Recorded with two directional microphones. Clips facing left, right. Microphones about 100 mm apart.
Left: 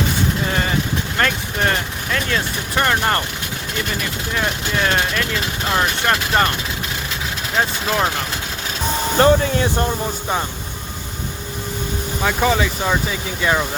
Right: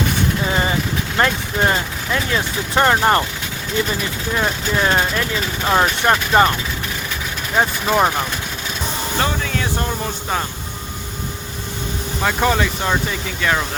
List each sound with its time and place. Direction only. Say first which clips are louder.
0.4 s vehicle: right 2 dB; 20° right (ahead or behind)
1.1 s speech: right 3 dB; 20° right (ahead or behind)
4.4 s speech: right 2 dB; 20° right (ahead or behind)
7.5 s speech: right 3 dB; 15° right (ahead or behind)
9.1 s speech: left 9 dB; 35° left (ahead or behind)
12.2 s speech: even; centre (ahead or behind)